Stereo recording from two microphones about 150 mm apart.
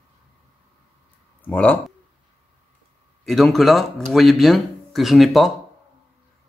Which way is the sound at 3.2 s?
Centre (ahead or behind).